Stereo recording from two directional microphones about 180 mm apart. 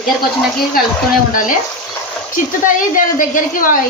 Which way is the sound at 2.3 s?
45° left (ahead or behind).